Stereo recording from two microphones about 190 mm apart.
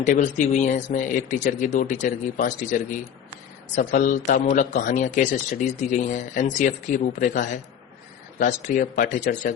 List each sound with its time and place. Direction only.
0.0 s a man's voice: 40° left (ahead or behind)